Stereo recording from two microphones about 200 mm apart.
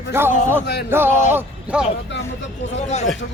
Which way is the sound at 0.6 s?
55° left (ahead or behind).